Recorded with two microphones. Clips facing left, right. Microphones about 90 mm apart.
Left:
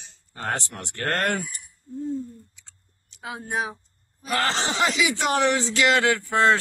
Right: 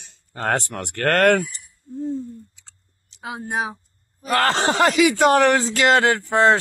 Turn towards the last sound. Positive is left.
turn(degrees=-30)  # may be behind; listen again after turning